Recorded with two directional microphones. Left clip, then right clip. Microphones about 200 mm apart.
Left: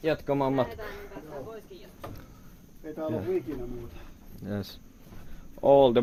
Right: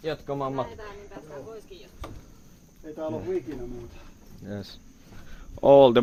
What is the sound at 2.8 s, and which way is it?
Speech, 10° left (ahead or behind).